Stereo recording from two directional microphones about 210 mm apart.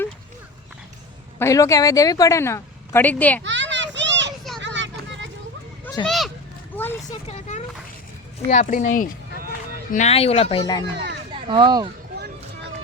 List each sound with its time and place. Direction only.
1.4 s a woman's voice: 15° left (ahead or behind)
3.4 s children playing: 60° right (ahead or behind)
4.6 s a sound: 60° right (ahead or behind)
5.8 s a sound: 15° left (ahead or behind)
6.1 s speech: centre (ahead or behind)
6.7 s a sound: 10° left (ahead or behind)
7.3 s speech: 30° left (ahead or behind)
10.9 s speech: 55° right (ahead or behind)
11.3 s speech: 25° right (ahead or behind)